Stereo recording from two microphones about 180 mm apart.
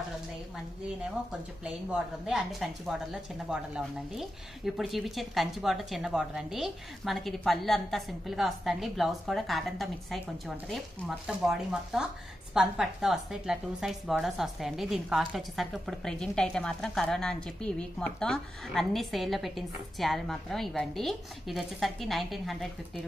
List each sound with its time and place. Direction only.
1.6 s a woman's voice: 5° right (ahead or behind)